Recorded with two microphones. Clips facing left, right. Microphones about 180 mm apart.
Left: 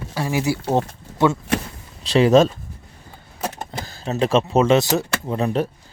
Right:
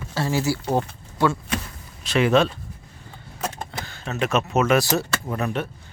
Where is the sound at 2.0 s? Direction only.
35° left (ahead or behind).